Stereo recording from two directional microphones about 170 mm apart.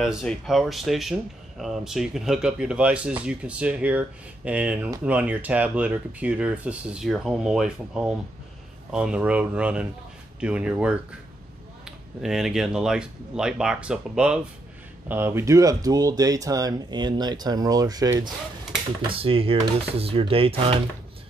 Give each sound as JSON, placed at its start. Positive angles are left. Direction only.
{"t": 0.0, "sound": "speech", "side_deg": 0}
{"t": 19.1, "sound": "speech", "side_deg": -35}